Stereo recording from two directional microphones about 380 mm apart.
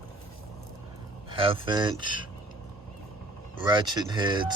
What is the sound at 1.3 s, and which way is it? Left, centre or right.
Speech, centre.